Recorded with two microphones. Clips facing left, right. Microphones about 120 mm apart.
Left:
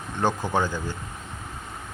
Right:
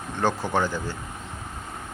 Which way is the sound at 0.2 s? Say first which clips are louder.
Even; 15° left (ahead or behind).